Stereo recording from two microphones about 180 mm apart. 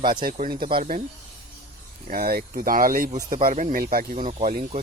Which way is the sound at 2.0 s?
55° right (ahead or behind).